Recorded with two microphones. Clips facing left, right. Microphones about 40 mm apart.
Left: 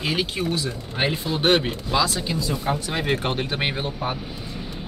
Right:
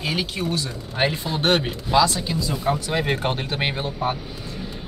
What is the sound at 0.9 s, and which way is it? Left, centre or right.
Speech, centre.